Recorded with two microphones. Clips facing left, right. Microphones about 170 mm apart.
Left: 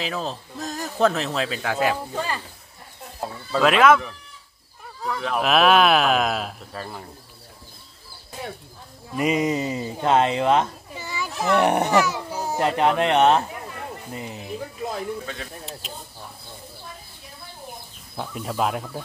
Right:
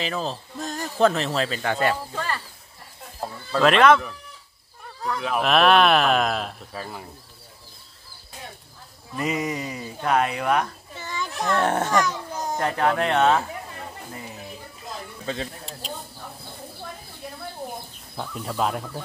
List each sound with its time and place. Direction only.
0.0 s speech: centre (ahead or behind)
2.1 s a child's voice: 15° left (ahead or behind)
3.2 s speech: 5° left (ahead or behind)
9.1 s speech: 20° left (ahead or behind)
11.0 s children playing: 10° left (ahead or behind)
11.5 s a child's voice: 15° left (ahead or behind)
12.0 s a sound: 10° left (ahead or behind)
12.5 s speech: 20° left (ahead or behind)
18.1 s speech: 5° left (ahead or behind)